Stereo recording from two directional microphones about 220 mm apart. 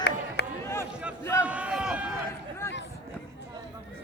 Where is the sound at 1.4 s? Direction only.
5° right (ahead or behind).